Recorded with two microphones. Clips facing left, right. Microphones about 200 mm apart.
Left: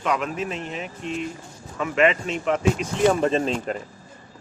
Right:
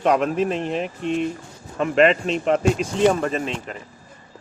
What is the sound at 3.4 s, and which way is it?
Speech, 40° left (ahead or behind).